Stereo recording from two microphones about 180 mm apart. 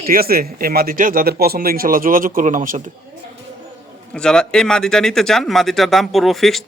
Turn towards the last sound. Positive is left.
turn(degrees=0)  # may be behind; listen again after turning